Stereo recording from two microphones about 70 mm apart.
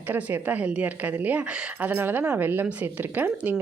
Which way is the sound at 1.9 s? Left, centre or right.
Right.